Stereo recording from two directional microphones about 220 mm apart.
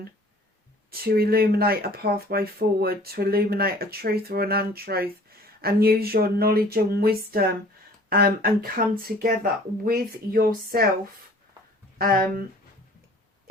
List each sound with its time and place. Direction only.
0.9 s speech: 45° right (ahead or behind)
11.9 s speech: 40° right (ahead or behind)